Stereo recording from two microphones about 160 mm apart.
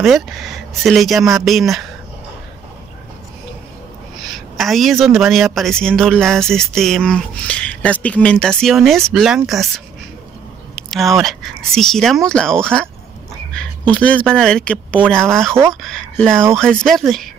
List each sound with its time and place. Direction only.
0.8 s a woman's voice: centre (ahead or behind)
4.6 s a woman's voice: centre (ahead or behind)
10.8 s a woman's voice: centre (ahead or behind)